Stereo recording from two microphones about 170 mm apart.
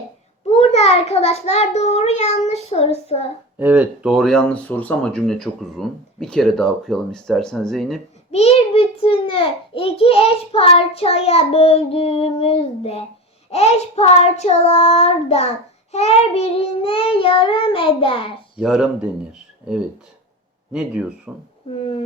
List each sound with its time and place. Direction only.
0.5 s a child's voice: 35° left (ahead or behind)
3.6 s speech: 10° right (ahead or behind)
8.3 s a child's voice: 40° left (ahead or behind)
18.6 s speech: centre (ahead or behind)
19.3 s a sound: 5° right (ahead or behind)
21.3 s speech: 10° right (ahead or behind)
21.8 s a sound: 35° left (ahead or behind)